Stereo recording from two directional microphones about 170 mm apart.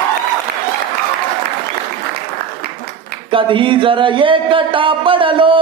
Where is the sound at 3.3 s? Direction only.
30° right (ahead or behind).